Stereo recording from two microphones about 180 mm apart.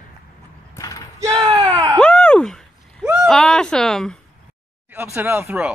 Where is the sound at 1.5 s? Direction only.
20° right (ahead or behind).